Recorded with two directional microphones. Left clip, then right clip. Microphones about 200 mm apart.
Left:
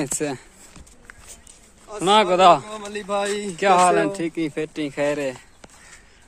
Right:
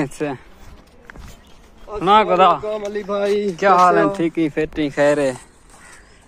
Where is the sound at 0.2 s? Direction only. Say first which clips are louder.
Right 2 dB; 35° left (ahead or behind).